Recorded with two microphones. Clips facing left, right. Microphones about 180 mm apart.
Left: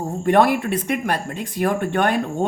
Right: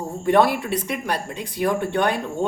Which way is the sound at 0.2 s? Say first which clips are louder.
Left 1 dB; 55° left (ahead or behind).